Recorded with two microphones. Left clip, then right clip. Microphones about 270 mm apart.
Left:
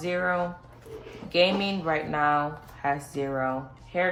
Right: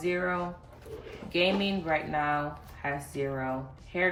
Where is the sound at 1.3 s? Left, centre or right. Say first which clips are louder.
Left 4 dB; centre.